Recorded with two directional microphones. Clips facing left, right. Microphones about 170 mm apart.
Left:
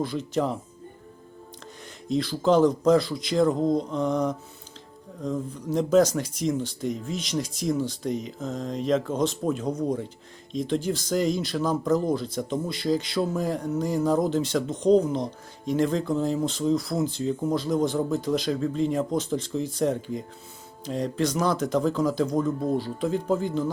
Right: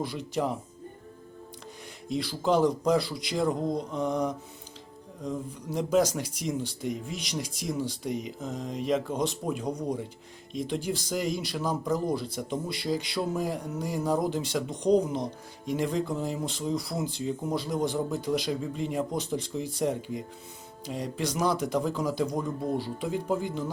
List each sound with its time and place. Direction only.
0.0 s speech: 10° right (ahead or behind)
2.0 s speech: 10° right (ahead or behind)